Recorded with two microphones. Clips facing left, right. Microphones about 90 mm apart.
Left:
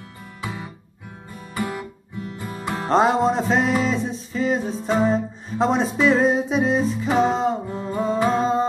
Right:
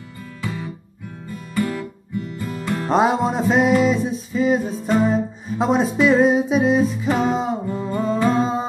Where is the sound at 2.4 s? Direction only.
25° left (ahead or behind).